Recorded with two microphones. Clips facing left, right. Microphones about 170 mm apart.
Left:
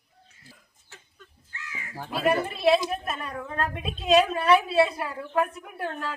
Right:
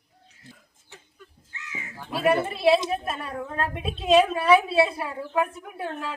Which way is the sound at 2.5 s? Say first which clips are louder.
Right 1 dB; centre (ahead or behind).